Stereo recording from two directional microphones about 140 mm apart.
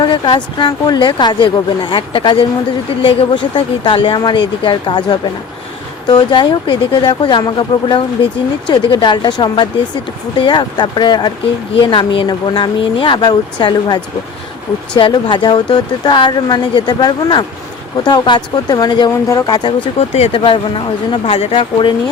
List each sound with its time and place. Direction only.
0.0 s speech: 35° left (ahead or behind)
6.3 s speech: 30° left (ahead or behind)
19.1 s speech: 20° left (ahead or behind)
20.0 s speech: 50° left (ahead or behind)